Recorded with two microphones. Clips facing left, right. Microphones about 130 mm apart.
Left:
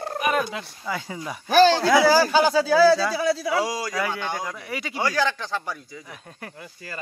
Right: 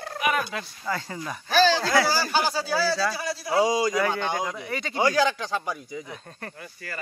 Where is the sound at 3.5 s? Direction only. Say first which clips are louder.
Right 3 dB; 20° right (ahead or behind).